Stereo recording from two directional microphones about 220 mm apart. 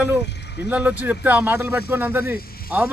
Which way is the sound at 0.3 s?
50° left (ahead or behind).